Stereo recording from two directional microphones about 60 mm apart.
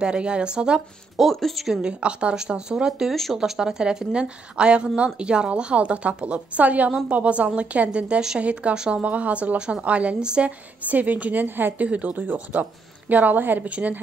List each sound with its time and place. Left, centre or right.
0.0 s a woman's voice: centre
1.1 s speech: centre
1.8 s a woman's voice: centre; by 13.7 s right
13.7 s a woman's voice: right